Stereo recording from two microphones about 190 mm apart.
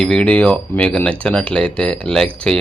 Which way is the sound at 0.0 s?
5° left (ahead or behind).